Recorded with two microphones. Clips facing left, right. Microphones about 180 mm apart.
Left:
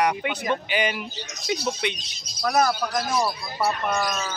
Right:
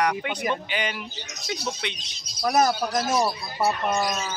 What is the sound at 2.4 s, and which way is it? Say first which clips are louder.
Speech: right 1 dB; 20° right (ahead or behind).